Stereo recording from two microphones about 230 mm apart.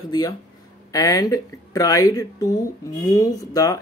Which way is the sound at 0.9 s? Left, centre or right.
Centre.